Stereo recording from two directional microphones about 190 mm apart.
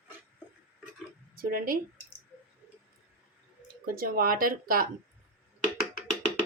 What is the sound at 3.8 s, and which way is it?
Speech, 50° right (ahead or behind).